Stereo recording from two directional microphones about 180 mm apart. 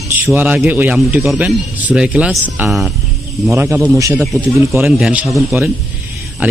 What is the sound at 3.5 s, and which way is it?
A man's voice, 15° right (ahead or behind).